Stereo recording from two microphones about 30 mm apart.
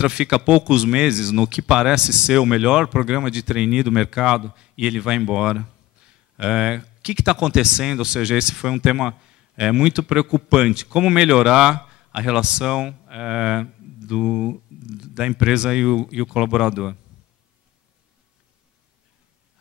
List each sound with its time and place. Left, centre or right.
0.0 s speech: right